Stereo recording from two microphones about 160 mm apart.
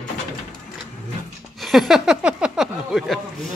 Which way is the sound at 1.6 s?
Centre (ahead or behind).